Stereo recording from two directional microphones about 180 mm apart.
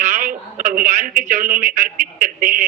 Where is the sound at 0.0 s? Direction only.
50° right (ahead or behind).